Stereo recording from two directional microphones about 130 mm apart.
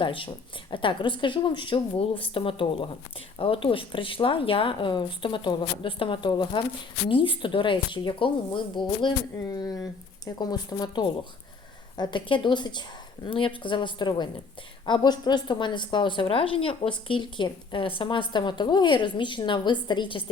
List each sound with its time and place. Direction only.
0.0 s a woman's voice: 40° left (ahead or behind)